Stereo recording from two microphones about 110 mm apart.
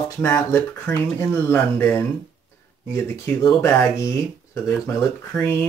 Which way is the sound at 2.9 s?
25° left (ahead or behind).